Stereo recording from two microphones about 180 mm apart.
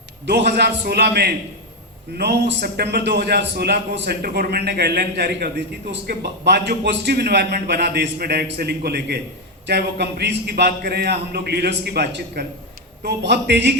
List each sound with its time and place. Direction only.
0.3 s a man's voice: 65° right (ahead or behind)